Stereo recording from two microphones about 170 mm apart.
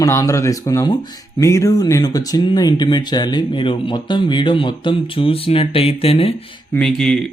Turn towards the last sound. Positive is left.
turn(degrees=5)  # may be behind; listen again after turning